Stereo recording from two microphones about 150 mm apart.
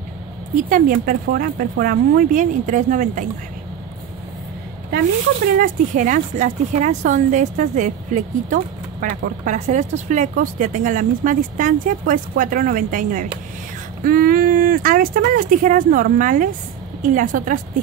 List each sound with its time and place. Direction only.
0.6 s speech: 65° right (ahead or behind)
5.6 s speech: 60° right (ahead or behind)